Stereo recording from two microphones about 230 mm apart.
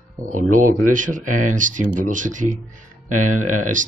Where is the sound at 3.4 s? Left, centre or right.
Right.